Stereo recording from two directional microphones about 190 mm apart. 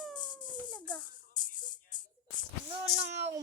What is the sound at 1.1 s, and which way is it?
Music, 45° left (ahead or behind).